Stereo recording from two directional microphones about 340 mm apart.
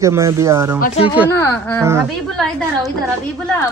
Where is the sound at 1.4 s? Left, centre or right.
Centre.